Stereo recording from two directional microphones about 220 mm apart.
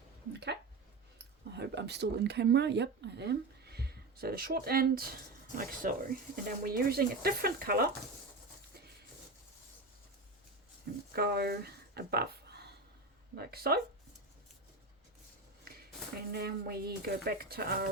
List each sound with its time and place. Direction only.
1.5 s speech: 50° right (ahead or behind)
11.1 s speech: 45° right (ahead or behind)
16.3 s speech: 45° right (ahead or behind)